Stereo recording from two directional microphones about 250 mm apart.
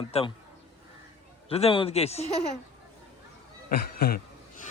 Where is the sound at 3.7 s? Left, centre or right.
Left.